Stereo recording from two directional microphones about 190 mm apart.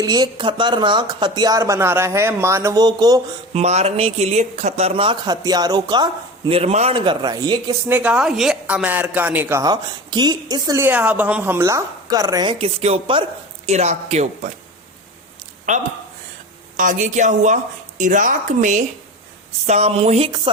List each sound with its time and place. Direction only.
0.0 s speech: 20° right (ahead or behind)
3.5 s speech: 35° right (ahead or behind)
7.9 s a woman's voice: 10° right (ahead or behind); by 14.5 s 35° right (ahead or behind)
16.7 s speech: 45° right (ahead or behind)